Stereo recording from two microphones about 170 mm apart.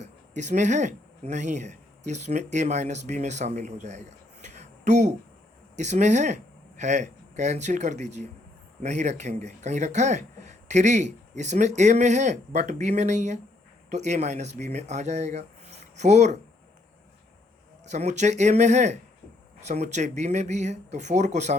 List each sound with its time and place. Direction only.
0.0 s a man's voice: 45° right (ahead or behind)
17.9 s speech: 45° right (ahead or behind)